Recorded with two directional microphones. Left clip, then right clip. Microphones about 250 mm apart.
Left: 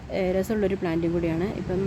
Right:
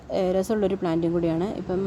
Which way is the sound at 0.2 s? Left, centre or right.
Right.